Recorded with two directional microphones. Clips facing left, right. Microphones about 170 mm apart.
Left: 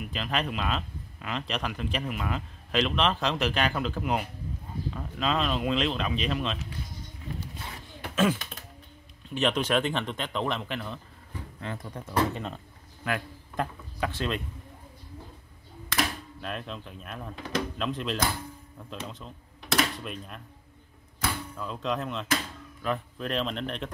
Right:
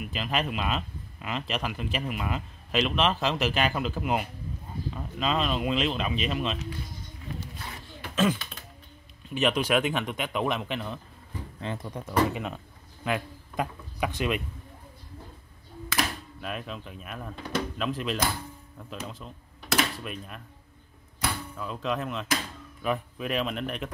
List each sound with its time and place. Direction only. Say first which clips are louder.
0.0 s speech: right 1 dB; 5° right (ahead or behind)
8.1 s speech: even; 10° left (ahead or behind)
9.3 s speech: right 1 dB; 10° right (ahead or behind)
12.3 s speech: right 2 dB; 10° right (ahead or behind)
15.9 s speech: left 1 dB; 5° right (ahead or behind)
21.5 s speech: right 1 dB; 5° right (ahead or behind)